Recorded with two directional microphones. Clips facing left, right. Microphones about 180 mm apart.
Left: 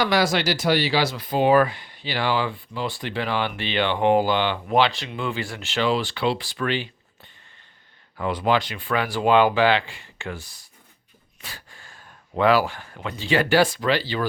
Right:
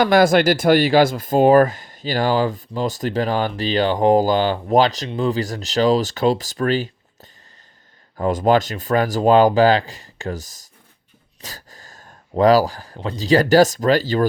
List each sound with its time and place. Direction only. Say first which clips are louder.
0.0 s speech: right 7 dB; 50° right (ahead or behind)
11.3 s a sound: right 4 dB; 40° right (ahead or behind)
12.3 s speech: right 5 dB; 40° right (ahead or behind)